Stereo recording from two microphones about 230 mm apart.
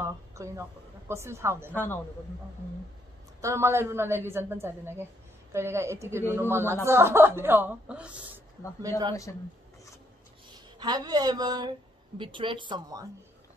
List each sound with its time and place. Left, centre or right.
0.0 s a woman's voice: centre
1.7 s a man's voice: centre
3.3 s speech: centre
9.1 s a man's voice: centre
10.8 s speech: centre